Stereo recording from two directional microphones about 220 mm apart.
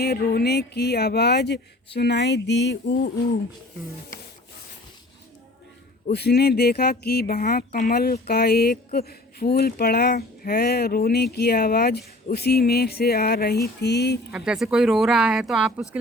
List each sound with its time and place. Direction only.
0.0 s speech: 45° left (ahead or behind)
6.1 s speech: 50° left (ahead or behind)
14.3 s speech: 5° right (ahead or behind)